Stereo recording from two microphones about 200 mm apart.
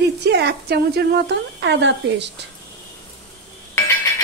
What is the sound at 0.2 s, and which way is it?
A woman's voice, 55° right (ahead or behind).